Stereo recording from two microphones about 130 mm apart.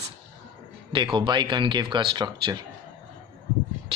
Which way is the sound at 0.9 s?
40° right (ahead or behind).